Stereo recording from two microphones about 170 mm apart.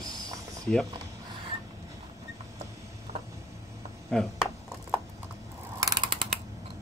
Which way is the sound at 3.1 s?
40° right (ahead or behind).